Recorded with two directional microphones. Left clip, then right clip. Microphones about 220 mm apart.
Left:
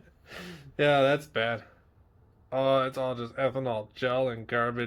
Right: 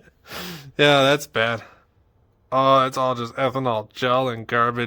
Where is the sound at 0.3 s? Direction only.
50° right (ahead or behind).